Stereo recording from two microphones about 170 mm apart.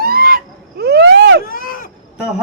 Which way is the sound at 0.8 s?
75° right (ahead or behind).